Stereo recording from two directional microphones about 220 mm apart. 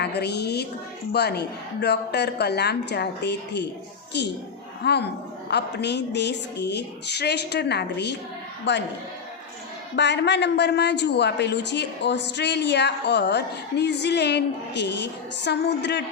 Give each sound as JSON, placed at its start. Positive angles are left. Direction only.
{"t": 0.0, "sound": "a woman's voice", "side_deg": 50}
{"t": 9.9, "sound": "a woman's voice", "side_deg": 50}